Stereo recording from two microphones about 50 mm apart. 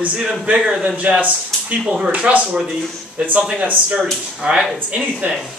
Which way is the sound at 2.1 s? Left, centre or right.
Right.